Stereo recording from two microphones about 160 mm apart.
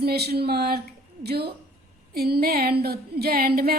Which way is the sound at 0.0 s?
85° right.